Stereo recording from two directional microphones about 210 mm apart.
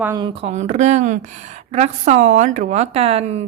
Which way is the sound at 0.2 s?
30° right (ahead or behind).